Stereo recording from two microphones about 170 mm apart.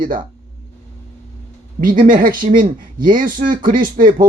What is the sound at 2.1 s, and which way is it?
Speech, 55° right (ahead or behind).